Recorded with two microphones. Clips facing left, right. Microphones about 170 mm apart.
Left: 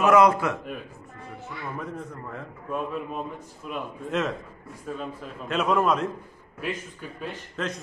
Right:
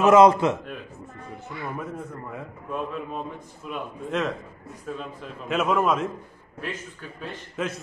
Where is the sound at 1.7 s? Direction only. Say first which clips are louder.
Right 1 dB; 5° right (ahead or behind).